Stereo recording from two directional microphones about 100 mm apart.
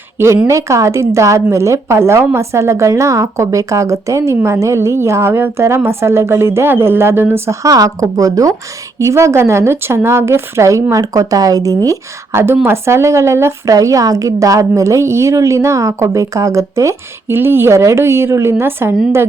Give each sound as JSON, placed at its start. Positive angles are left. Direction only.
{"t": 0.4, "sound": "a woman's voice", "side_deg": -30}
{"t": 11.9, "sound": "a woman's voice", "side_deg": -25}